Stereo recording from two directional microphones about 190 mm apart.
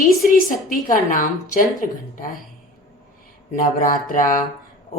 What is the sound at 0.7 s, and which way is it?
A woman's voice, 45° left (ahead or behind).